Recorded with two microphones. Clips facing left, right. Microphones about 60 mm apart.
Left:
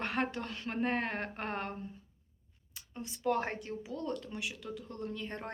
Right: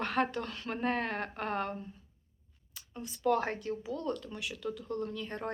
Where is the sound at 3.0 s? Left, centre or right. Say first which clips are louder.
Right 3 dB; left.